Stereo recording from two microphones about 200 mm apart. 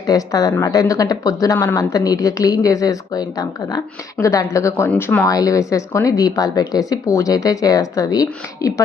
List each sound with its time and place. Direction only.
0.1 s speech: 15° left (ahead or behind)